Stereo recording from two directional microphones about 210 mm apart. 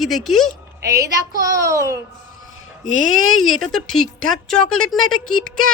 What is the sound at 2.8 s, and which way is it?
Speech, 65° left (ahead or behind).